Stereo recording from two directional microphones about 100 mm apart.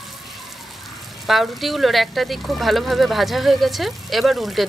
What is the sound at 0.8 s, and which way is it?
Speech, centre (ahead or behind).